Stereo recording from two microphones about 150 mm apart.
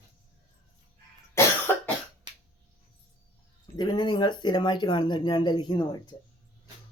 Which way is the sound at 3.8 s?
30° left (ahead or behind).